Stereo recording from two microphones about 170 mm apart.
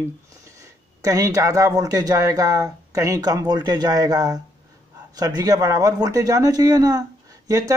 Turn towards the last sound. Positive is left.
turn(degrees=-20)  # may be behind; listen again after turning